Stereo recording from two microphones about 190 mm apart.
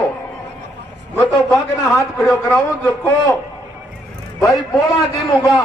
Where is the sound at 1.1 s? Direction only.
15° left (ahead or behind).